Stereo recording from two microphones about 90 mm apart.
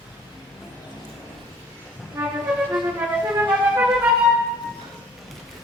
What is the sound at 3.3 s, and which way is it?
Flute, 25° right (ahead or behind).